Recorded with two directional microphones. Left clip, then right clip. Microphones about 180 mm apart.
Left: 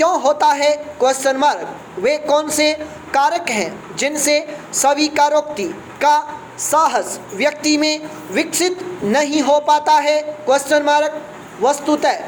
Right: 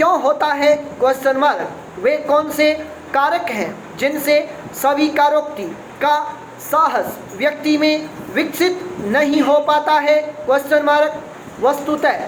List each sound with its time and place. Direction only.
0.0 s a woman's voice: 35° left (ahead or behind)